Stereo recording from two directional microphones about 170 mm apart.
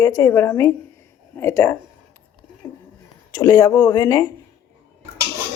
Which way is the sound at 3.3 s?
20° left (ahead or behind).